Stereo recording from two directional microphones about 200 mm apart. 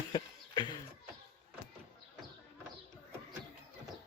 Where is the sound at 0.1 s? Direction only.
20° left (ahead or behind).